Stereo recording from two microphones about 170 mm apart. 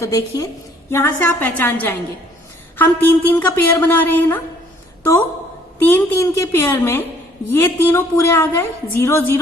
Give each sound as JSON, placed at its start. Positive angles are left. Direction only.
{"t": 0.0, "sound": "a woman's voice", "side_deg": 20}
{"t": 5.8, "sound": "a woman's voice", "side_deg": 10}